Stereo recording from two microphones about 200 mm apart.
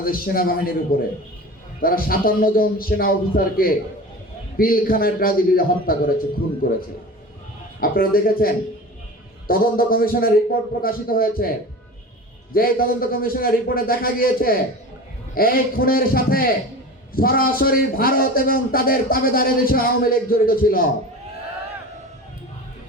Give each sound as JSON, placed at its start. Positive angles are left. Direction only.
{"t": 0.0, "sound": "a man's voice", "side_deg": 45}
{"t": 12.5, "sound": "a man's voice", "side_deg": 45}